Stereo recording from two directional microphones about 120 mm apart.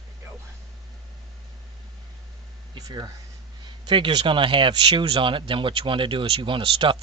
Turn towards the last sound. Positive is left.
turn(degrees=-45)  # may be behind; listen again after turning